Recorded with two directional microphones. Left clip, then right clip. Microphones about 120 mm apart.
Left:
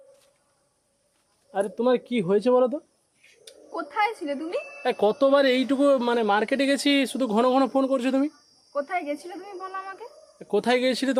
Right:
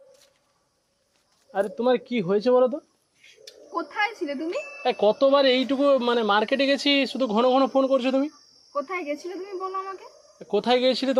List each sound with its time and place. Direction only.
1.5 s speech: 30° left (ahead or behind)
3.4 s a sound: 15° left (ahead or behind)
4.8 s speech: 40° left (ahead or behind)
8.7 s speech: 20° left (ahead or behind)
10.3 s speech: 35° left (ahead or behind)